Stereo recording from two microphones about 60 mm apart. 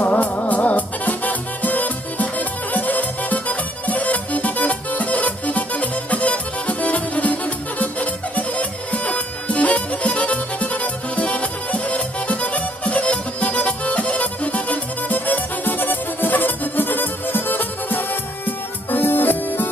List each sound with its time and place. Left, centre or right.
0.0 s music: left